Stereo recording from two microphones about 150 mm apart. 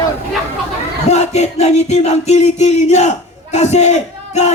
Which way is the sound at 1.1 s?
50° left (ahead or behind).